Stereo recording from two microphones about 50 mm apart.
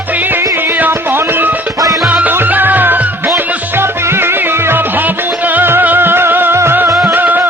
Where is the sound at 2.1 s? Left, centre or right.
Right.